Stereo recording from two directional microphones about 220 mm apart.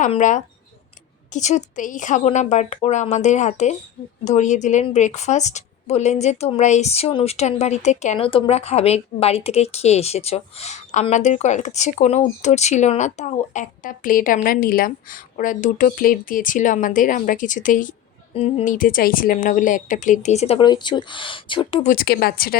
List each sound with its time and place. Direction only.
0.0 s a woman's voice: 35° left (ahead or behind)
21.8 s speech: 45° left (ahead or behind)